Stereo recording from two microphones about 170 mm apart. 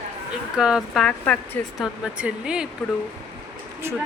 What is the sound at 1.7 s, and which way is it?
Speech, 5° right (ahead or behind).